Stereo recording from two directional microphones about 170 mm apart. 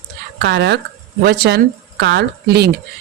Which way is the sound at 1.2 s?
70° right (ahead or behind).